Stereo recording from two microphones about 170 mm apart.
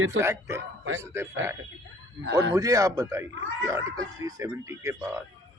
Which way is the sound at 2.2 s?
75° right (ahead or behind).